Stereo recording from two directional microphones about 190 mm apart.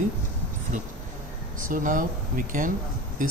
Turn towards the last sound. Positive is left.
turn(degrees=-45)  # may be behind; listen again after turning